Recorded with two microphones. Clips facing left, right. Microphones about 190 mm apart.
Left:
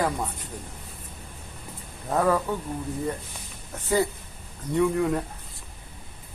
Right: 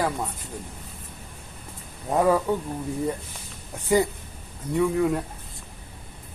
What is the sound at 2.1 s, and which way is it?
Speech, 15° right (ahead or behind).